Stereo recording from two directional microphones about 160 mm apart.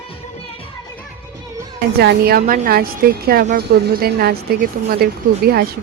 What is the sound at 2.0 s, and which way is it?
Speech, 85° right.